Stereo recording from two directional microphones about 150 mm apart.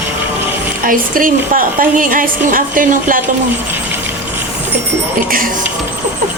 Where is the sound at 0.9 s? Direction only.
65° right (ahead or behind).